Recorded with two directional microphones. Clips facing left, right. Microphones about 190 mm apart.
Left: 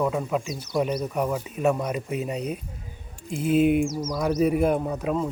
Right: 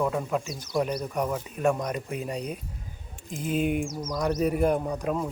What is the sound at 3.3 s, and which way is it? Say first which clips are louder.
Speech: left 6 dB; 40° right (ahead or behind).